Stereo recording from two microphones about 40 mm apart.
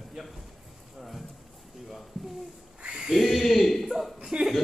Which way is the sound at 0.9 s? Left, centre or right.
Centre.